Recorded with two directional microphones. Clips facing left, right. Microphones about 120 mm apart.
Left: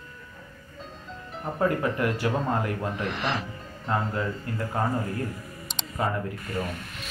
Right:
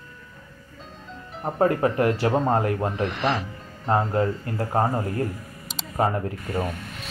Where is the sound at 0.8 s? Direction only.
Centre (ahead or behind).